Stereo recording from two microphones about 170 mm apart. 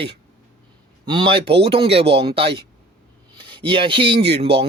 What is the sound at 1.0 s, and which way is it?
Speech, 25° right (ahead or behind).